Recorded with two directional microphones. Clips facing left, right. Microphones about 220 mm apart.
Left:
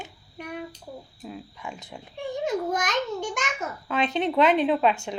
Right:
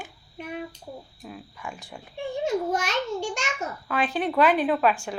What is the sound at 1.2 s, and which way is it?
A woman's voice, 20° left (ahead or behind).